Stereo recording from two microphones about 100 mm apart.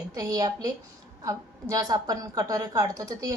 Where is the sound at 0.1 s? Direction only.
35° right (ahead or behind).